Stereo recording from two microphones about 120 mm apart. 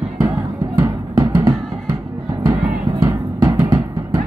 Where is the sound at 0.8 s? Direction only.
30° right (ahead or behind).